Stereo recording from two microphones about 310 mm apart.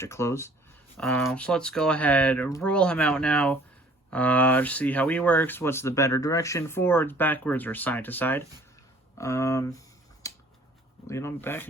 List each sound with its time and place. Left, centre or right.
0.0 s speech: centre
10.2 s finger snapping: centre
11.0 s speech: centre